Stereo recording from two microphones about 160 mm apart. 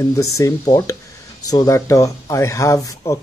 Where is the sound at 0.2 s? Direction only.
20° left (ahead or behind).